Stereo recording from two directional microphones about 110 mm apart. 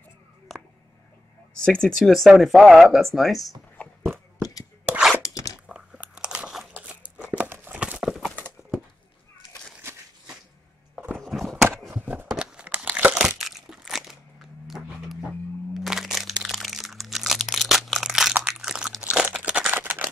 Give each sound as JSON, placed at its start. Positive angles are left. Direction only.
{"t": 0.5, "sound": "a sound", "side_deg": 0}
{"t": 1.6, "sound": "speech", "side_deg": 5}
{"t": 3.8, "sound": "biting", "side_deg": 15}
{"t": 5.2, "sound": "crunch", "side_deg": 30}
{"t": 5.7, "sound": "biting", "side_deg": -10}
{"t": 6.8, "sound": "crumpling", "side_deg": -10}
{"t": 7.8, "sound": "clip-clop", "side_deg": -5}
{"t": 11.1, "sound": "a sound", "side_deg": 0}
{"t": 11.9, "sound": "a sound", "side_deg": -15}
{"t": 12.3, "sound": "crumpling", "side_deg": -5}